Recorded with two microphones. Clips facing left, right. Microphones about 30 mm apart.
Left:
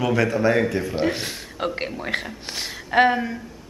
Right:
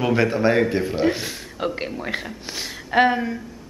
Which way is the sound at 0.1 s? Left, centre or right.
Right.